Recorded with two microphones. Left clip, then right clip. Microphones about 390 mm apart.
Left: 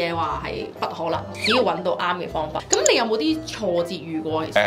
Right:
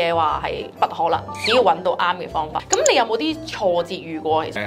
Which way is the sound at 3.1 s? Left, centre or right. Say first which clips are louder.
Even; right.